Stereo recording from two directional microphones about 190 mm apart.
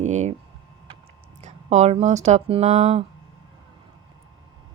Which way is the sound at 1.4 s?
35° right (ahead or behind).